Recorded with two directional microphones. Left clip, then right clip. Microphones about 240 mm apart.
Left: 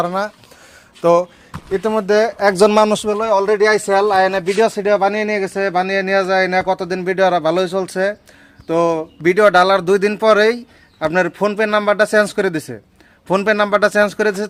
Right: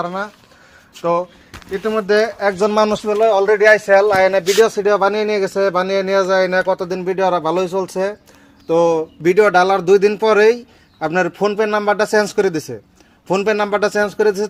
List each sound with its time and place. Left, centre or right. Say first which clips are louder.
0.0 s speech: left 4 dB; left
1.7 s speech: left 1 dB; left
2.5 s speech: left 5 dB; left
4.1 s speech: right 1 dB; left
4.5 s speech: right 1 dB; centre